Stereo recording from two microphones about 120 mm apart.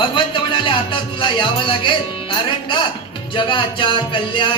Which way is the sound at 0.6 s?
45° left (ahead or behind).